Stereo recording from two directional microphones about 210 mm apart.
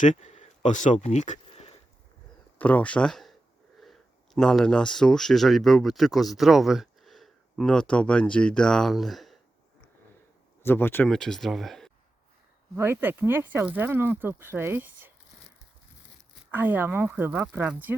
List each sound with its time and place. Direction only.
0.0 s a sound: 35° left (ahead or behind)
2.6 s speech: 5° left (ahead or behind)
4.4 s speech: 5° left (ahead or behind)
10.6 s speech: 10° left (ahead or behind)
12.7 s speech: 10° right (ahead or behind)
16.5 s speech: 10° right (ahead or behind)